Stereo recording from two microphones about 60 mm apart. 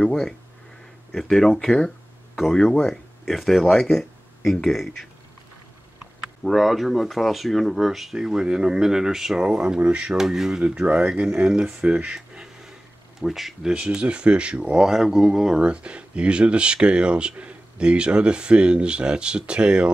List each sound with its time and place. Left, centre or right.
0.0 s speech: centre
1.3 s speech: centre
6.4 s speech: centre
10.1 s speech: centre
10.6 s speech: centre
12.2 s a sound: centre
13.2 s speech: centre
15.6 s speech: centre